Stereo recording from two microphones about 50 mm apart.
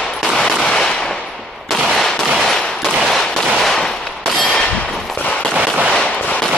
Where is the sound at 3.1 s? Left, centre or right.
Centre.